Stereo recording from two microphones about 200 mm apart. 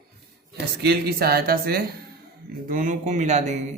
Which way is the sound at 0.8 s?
55° right (ahead or behind).